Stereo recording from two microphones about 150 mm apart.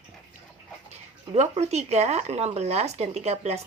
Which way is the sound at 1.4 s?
45° right (ahead or behind).